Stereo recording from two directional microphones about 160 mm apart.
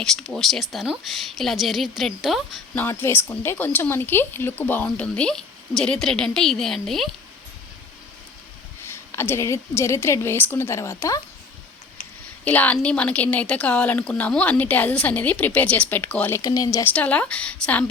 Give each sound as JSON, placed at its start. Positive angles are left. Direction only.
{"t": 0.0, "sound": "speech", "side_deg": 0}
{"t": 2.7, "sound": "speech", "side_deg": 15}
{"t": 8.9, "sound": "speech", "side_deg": 15}
{"t": 12.5, "sound": "speech", "side_deg": 10}
{"t": 16.4, "sound": "speech", "side_deg": 25}
{"t": 16.9, "sound": "speech", "side_deg": 10}